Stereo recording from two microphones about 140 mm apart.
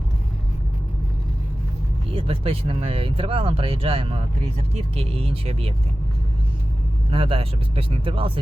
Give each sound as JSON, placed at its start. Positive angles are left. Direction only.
{"t": 2.1, "sound": "speech", "side_deg": -40}
{"t": 7.1, "sound": "speech", "side_deg": -40}